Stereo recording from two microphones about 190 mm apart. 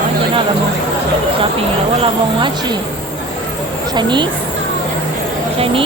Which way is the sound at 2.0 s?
25° right (ahead or behind).